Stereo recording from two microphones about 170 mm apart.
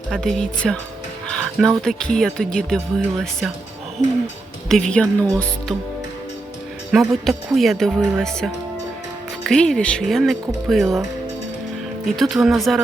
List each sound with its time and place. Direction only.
0.1 s speech: 5° left (ahead or behind)
4.7 s speech: 5° left (ahead or behind)
7.1 s speech: centre (ahead or behind)
12.0 s speech: centre (ahead or behind)